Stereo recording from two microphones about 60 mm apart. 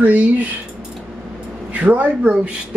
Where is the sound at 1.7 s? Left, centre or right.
Right.